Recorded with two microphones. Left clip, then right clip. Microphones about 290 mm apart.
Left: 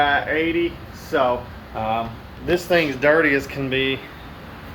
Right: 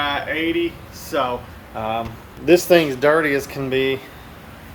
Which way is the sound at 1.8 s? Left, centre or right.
Centre.